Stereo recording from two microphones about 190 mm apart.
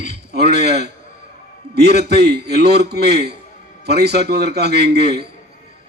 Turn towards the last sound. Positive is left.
turn(degrees=-60)  # may be behind; listen again after turning